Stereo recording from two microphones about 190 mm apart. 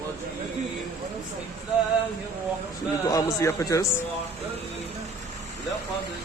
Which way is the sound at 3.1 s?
15° left (ahead or behind).